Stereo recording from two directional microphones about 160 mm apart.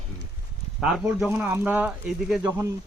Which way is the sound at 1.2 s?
10° right (ahead or behind).